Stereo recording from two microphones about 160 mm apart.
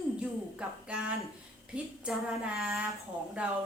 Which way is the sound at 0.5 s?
5° right (ahead or behind).